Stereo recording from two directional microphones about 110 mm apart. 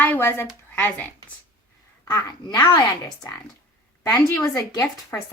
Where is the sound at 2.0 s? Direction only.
40° left (ahead or behind).